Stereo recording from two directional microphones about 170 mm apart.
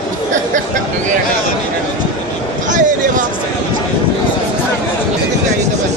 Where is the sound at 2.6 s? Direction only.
50° right (ahead or behind).